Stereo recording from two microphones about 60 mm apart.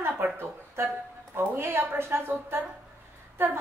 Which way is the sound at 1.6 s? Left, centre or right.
Right.